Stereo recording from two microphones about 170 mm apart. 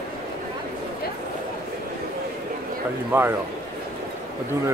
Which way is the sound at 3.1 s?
10° right (ahead or behind).